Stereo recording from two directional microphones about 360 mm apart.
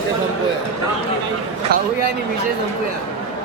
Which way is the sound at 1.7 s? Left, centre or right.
Right.